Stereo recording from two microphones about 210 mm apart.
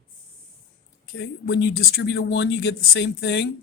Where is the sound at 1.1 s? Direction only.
55° left (ahead or behind).